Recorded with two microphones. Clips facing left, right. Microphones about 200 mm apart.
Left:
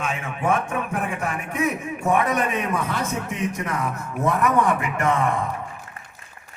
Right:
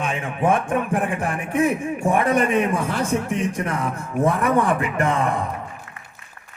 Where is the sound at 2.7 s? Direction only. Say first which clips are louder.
Right 3 dB; 30° right (ahead or behind).